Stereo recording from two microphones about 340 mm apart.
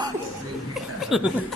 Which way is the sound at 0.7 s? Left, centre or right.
Centre.